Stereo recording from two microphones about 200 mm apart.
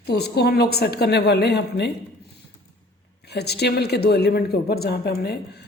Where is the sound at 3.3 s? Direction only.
55° left (ahead or behind).